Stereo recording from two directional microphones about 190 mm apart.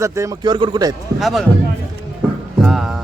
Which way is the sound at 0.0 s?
15° right (ahead or behind).